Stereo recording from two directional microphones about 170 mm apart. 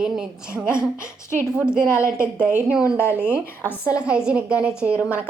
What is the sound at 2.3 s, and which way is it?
Speech, 10° right (ahead or behind).